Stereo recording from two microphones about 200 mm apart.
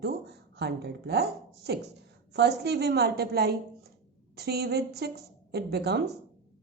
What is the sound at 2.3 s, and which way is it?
A woman's voice, 55° right (ahead or behind).